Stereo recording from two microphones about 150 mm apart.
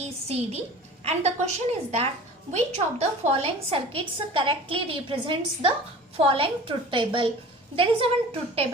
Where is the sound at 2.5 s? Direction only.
45° right (ahead or behind).